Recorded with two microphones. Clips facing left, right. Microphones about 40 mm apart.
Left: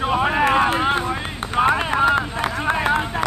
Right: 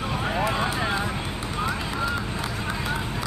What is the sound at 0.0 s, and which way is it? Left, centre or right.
Run, left.